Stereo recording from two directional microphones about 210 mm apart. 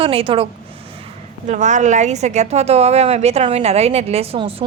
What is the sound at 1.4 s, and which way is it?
A woman's voice, 35° right (ahead or behind).